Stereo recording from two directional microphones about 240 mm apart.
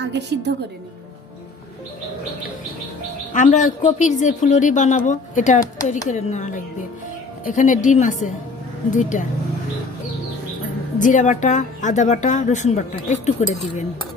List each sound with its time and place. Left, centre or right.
0.0 s a woman's voice: right
3.3 s speech: left
11.0 s speech: left